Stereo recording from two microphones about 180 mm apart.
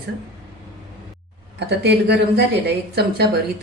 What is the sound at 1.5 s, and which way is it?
Speech, 65° right (ahead or behind).